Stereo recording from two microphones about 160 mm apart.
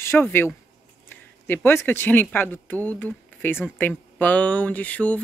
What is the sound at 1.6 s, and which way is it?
Speech, 15° left (ahead or behind).